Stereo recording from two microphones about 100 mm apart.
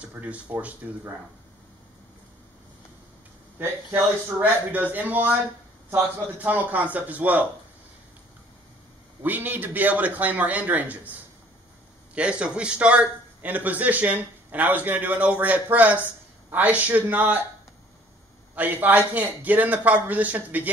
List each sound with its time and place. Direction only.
0.0 s a man's voice: 15° right (ahead or behind)
3.5 s a man's voice: 20° right (ahead or behind)
9.2 s a man's voice: 20° right (ahead or behind)
12.2 s a man's voice: 10° right (ahead or behind)
18.5 s a man's voice: 15° right (ahead or behind)